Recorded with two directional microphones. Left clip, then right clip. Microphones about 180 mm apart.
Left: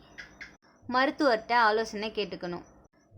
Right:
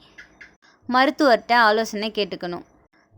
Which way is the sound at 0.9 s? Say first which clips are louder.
Right 8 dB; 40° right (ahead or behind).